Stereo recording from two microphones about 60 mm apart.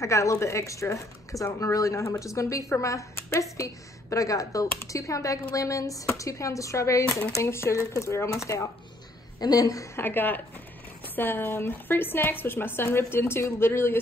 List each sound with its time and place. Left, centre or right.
0.0 s speech: left
4.7 s speech: left
9.5 s a woman's voice: left
9.9 s a woman's voice: left